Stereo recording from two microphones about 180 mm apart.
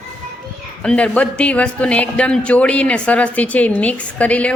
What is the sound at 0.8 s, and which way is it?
Speech, 5° left (ahead or behind).